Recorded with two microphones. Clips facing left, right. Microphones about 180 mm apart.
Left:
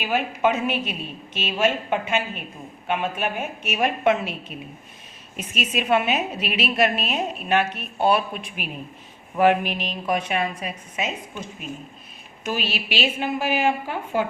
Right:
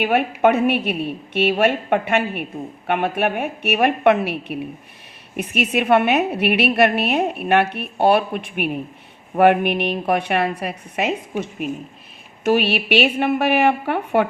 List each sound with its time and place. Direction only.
0.0 s a woman's voice: 60° right (ahead or behind)